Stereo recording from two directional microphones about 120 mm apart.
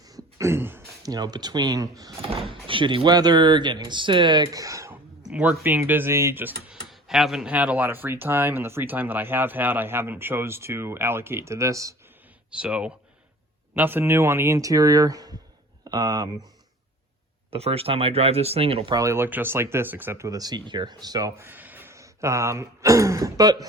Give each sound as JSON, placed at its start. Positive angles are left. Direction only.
{"t": 0.0, "sound": "a sound", "side_deg": -30}
{"t": 1.0, "sound": "speech", "side_deg": -35}
{"t": 2.2, "sound": "speech", "side_deg": -50}
{"t": 5.3, "sound": "speech", "side_deg": -10}
{"t": 6.7, "sound": "speech", "side_deg": -5}
{"t": 12.5, "sound": "speech", "side_deg": -10}
{"t": 17.5, "sound": "speech", "side_deg": -55}
{"t": 18.9, "sound": "speech", "side_deg": -25}